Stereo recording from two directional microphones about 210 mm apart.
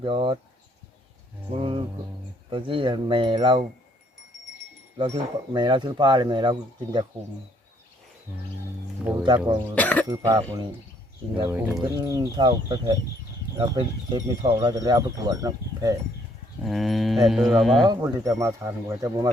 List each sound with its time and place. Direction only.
0.0 s speech: 25° right (ahead or behind)
1.5 s speech: 25° right (ahead or behind)
4.9 s speech: 25° right (ahead or behind)
9.2 s speech: 20° right (ahead or behind)
9.7 s cough: 5° left (ahead or behind)
10.1 s speech: 20° right (ahead or behind)
11.5 s speech: 10° right (ahead or behind)
16.6 s speech: centre (ahead or behind)
17.8 s speech: 15° right (ahead or behind)